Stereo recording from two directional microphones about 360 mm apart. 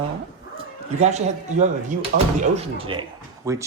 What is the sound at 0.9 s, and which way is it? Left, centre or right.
A man's voice, centre.